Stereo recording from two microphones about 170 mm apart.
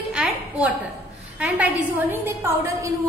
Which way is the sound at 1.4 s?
10° right (ahead or behind).